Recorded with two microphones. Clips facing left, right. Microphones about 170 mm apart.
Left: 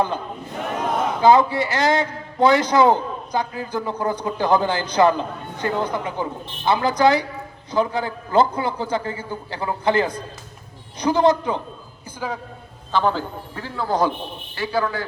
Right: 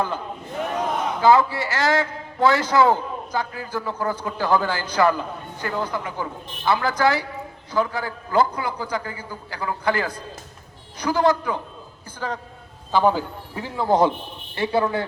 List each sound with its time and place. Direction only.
1.2 s a man's voice: 20° left (ahead or behind)
12.2 s a man's voice: 10° left (ahead or behind)
12.9 s a man's voice: 10° right (ahead or behind)